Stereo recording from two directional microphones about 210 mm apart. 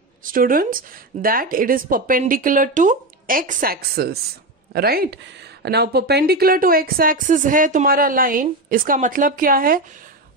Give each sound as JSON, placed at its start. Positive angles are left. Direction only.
{"t": 0.2, "sound": "speech", "side_deg": -40}